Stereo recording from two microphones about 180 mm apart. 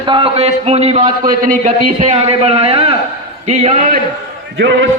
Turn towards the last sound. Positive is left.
turn(degrees=-75)  # may be behind; listen again after turning